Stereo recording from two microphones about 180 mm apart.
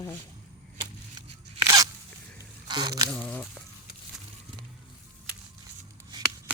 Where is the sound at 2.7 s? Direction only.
20° right (ahead or behind).